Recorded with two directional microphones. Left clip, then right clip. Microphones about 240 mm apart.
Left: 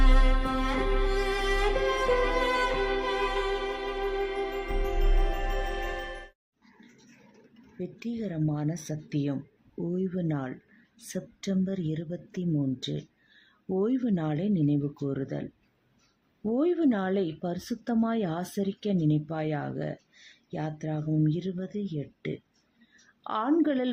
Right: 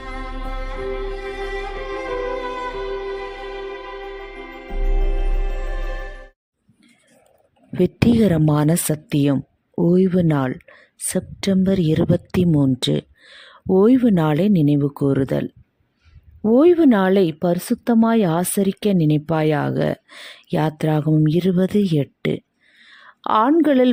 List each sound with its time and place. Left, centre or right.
0.0 s music: centre
7.8 s speech: right
16.5 s speech: right